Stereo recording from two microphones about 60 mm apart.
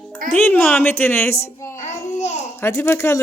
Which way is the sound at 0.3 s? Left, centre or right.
Left.